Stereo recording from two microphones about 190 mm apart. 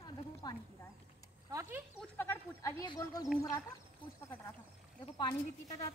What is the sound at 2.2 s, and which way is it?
Speech, 15° left (ahead or behind).